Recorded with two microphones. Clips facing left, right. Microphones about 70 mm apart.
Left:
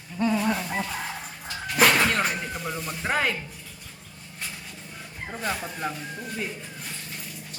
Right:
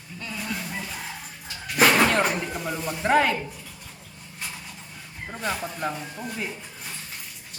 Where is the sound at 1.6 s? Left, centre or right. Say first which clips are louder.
Right 1 dB; centre.